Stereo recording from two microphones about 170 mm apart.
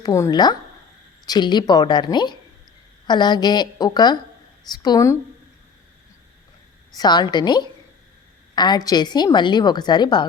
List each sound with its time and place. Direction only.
0.0 s a woman's voice: 20° left (ahead or behind)
6.9 s a woman's voice: 25° left (ahead or behind)